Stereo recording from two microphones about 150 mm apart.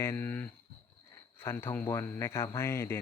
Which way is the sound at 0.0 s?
15° left (ahead or behind).